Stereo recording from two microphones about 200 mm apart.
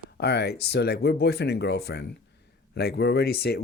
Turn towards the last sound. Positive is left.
turn(degrees=55)  # may be behind; listen again after turning